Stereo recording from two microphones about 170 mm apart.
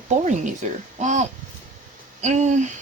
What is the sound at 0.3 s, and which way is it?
Speech, 45° right (ahead or behind).